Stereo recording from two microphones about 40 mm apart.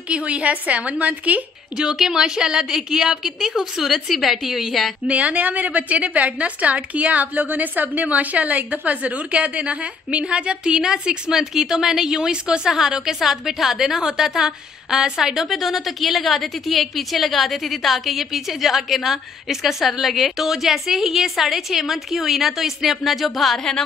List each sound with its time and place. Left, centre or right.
0.1 s a woman's voice: right
2.0 s a woman's voice: centre
5.0 s a woman's voice: right; by 15.4 s centre
15.5 s a woman's voice: centre